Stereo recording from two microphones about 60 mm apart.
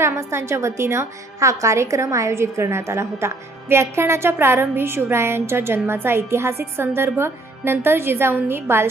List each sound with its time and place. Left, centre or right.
0.0 s a woman's voice: right